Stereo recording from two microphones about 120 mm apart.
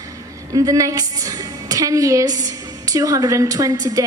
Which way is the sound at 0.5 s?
30° right (ahead or behind).